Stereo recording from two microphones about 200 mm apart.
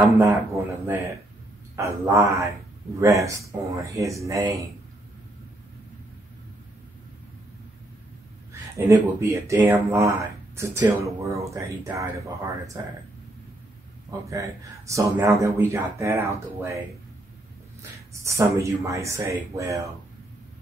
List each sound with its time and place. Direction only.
0.1 s a man's voice: 15° right (ahead or behind)
8.7 s speech: 15° right (ahead or behind)
14.2 s speech: 15° right (ahead or behind)
17.9 s speech: 15° right (ahead or behind)